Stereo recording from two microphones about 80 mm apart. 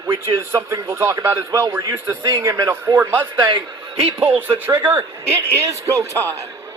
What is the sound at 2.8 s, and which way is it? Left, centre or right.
Speech, right.